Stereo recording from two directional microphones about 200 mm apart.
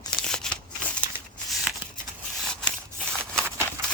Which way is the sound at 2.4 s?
5° left (ahead or behind).